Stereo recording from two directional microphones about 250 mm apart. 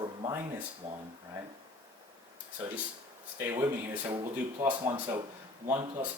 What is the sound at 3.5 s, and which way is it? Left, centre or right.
Speech, centre.